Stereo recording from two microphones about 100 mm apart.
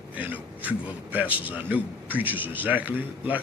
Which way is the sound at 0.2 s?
15° right (ahead or behind).